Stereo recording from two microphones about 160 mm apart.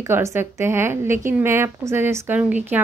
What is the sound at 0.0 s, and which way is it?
Speech, 15° right (ahead or behind).